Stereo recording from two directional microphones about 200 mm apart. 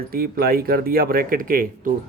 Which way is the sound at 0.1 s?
50° right (ahead or behind).